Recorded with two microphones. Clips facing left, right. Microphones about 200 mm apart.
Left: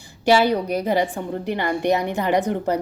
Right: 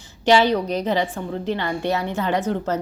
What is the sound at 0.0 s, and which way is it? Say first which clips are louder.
A woman's voice: even; 10° left (ahead or behind).